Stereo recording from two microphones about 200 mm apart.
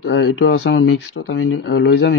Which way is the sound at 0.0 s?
65° left (ahead or behind).